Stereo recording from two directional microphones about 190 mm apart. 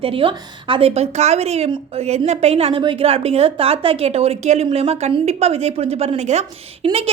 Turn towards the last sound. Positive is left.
turn(degrees=-30)  # may be behind; listen again after turning